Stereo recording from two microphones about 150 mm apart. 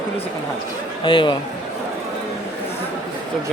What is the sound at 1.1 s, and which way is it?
Speech, 30° left (ahead or behind).